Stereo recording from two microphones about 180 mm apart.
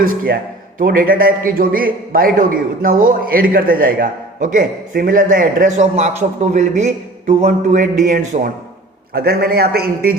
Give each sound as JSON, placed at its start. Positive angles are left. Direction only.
{"t": 0.8, "sound": "a man's voice", "side_deg": -55}
{"t": 9.1, "sound": "a man's voice", "side_deg": -60}